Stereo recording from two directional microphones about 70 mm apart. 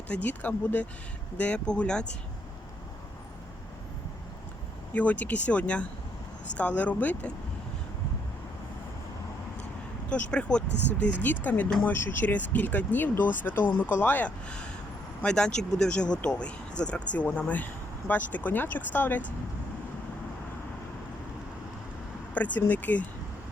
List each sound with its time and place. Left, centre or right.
0.1 s speech: left
4.9 s speech: left
10.1 s speech: centre
22.4 s speech: left